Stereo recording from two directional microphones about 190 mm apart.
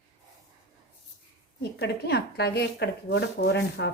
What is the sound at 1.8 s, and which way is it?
Speech, 60° left (ahead or behind).